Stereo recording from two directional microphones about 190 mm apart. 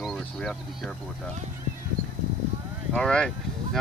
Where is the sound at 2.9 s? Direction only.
5° left (ahead or behind).